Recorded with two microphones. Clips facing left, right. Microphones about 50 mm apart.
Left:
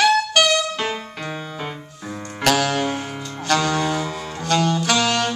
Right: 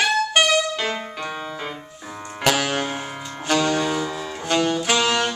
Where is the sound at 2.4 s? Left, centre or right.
Right; by 4.4 s centre.